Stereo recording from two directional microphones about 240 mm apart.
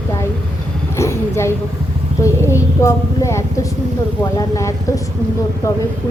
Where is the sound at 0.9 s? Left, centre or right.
Centre.